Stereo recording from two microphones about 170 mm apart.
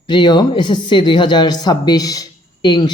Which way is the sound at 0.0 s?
25° left (ahead or behind).